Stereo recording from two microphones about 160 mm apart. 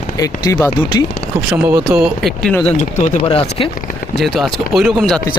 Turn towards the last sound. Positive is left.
turn(degrees=0)  # may be behind; listen again after turning